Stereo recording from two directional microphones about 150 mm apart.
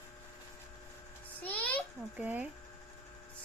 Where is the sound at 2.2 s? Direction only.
10° right (ahead or behind).